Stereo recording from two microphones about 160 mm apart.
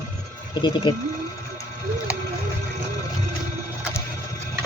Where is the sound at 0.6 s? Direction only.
30° left (ahead or behind).